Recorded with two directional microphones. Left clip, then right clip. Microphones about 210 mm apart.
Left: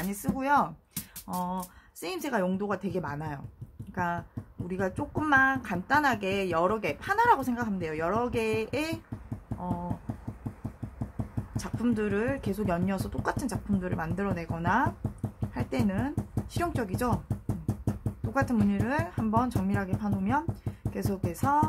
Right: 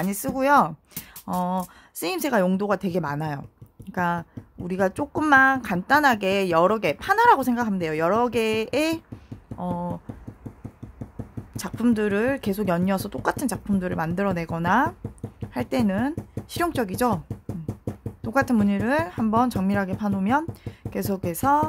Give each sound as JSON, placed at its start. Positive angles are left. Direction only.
{"t": 0.0, "sound": "speech", "side_deg": -55}
{"t": 11.5, "sound": "speech", "side_deg": -50}
{"t": 18.3, "sound": "speech", "side_deg": -50}